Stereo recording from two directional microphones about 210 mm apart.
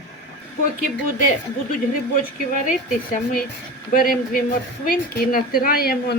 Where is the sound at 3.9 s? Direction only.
40° left (ahead or behind).